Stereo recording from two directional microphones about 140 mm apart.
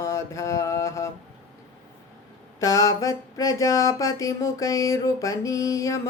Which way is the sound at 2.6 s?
25° left (ahead or behind).